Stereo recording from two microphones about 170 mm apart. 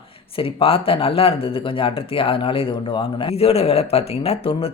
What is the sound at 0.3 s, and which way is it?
Speech, 30° left (ahead or behind).